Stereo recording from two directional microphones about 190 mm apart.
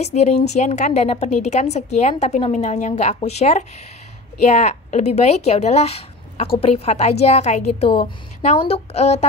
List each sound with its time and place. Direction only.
0.0 s a woman's voice: 35° left (ahead or behind)